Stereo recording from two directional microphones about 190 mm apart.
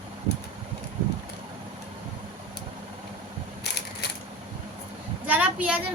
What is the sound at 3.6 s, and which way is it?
Crushing, 60° left (ahead or behind).